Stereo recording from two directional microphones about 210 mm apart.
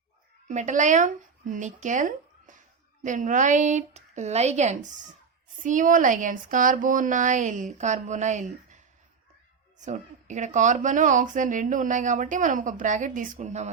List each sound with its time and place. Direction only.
0.4 s speech: 35° right (ahead or behind)